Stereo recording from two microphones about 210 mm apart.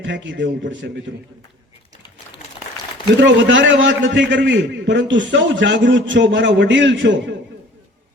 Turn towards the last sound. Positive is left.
turn(degrees=-60)  # may be behind; listen again after turning